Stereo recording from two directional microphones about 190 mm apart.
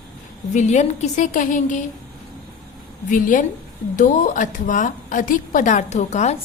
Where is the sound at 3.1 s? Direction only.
45° left (ahead or behind).